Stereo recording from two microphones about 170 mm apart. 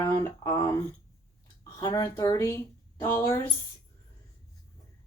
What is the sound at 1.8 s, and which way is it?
Speech, 20° left (ahead or behind).